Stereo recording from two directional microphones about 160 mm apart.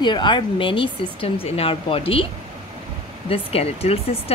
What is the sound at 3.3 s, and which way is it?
Speech, 40° left (ahead or behind).